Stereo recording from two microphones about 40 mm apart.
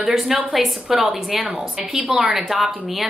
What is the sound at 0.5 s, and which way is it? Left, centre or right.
A woman's voice, centre.